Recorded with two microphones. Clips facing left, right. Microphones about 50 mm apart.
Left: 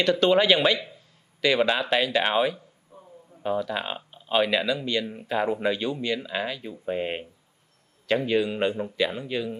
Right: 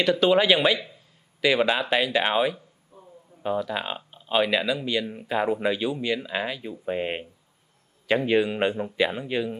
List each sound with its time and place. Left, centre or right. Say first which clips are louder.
0.0 s a man's voice: even; centre